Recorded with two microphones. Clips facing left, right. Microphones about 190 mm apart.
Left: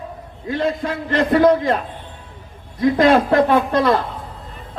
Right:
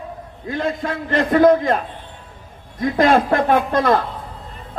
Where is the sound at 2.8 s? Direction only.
50° right (ahead or behind).